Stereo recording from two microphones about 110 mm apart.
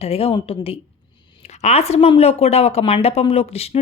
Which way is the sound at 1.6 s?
75° left (ahead or behind).